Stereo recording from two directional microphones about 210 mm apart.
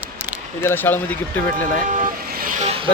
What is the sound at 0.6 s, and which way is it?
Speech, 10° left (ahead or behind).